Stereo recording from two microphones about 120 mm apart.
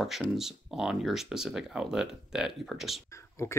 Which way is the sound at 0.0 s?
5° right (ahead or behind).